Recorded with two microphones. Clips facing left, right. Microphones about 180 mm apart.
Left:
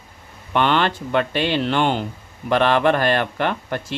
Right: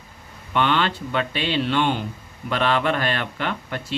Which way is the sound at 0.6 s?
50° left (ahead or behind).